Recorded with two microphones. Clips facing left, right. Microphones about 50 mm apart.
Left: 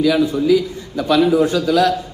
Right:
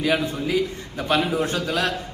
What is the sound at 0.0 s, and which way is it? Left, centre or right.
A man's voice, right.